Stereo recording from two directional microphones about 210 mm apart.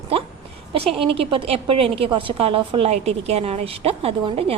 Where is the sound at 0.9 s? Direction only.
25° right (ahead or behind).